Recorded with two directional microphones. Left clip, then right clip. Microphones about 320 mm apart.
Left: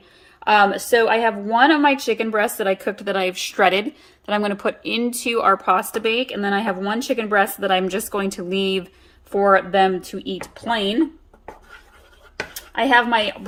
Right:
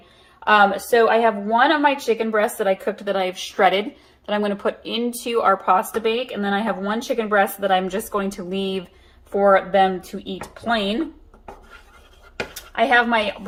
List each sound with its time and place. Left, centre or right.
0.4 s speech: left
12.7 s speech: left